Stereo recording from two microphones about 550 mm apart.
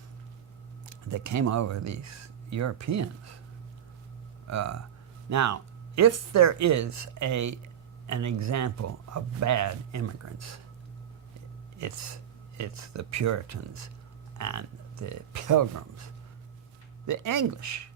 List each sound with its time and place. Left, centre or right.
1.1 s speech: right
4.4 s speech: right
11.8 s speech: right
17.1 s speech: right